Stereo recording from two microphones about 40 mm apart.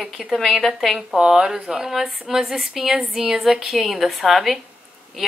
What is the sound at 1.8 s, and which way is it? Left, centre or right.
A woman's voice, centre.